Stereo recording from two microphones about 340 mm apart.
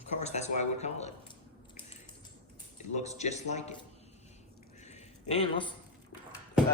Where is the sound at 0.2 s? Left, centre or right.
Centre.